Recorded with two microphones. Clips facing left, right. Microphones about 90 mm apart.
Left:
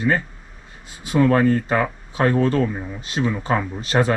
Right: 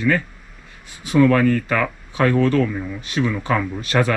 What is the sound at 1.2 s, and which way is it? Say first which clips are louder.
Speech: right 1 dB; 30° left (ahead or behind).